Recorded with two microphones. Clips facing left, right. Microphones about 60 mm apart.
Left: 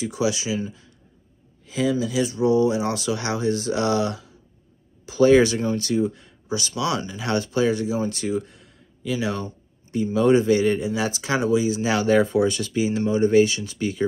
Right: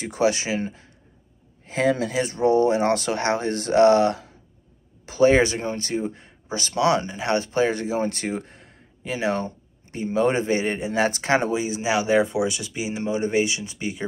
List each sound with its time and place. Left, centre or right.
0.0 s speech: right
11.8 s speech: centre